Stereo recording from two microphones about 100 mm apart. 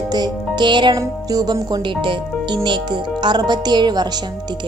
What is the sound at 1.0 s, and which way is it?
Speech, 40° right (ahead or behind).